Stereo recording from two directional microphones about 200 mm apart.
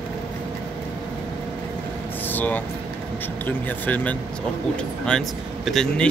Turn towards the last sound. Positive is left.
turn(degrees=5)  # may be behind; listen again after turning